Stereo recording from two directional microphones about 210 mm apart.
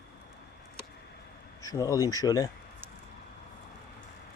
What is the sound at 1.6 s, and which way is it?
Speech, 15° left (ahead or behind).